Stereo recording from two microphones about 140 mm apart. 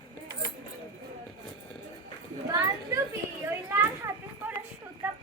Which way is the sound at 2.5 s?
20° right (ahead or behind).